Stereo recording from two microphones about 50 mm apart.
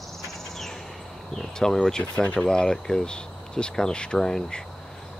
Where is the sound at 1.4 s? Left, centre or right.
Centre.